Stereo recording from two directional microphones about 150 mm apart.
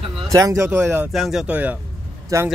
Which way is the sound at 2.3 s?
20° right (ahead or behind).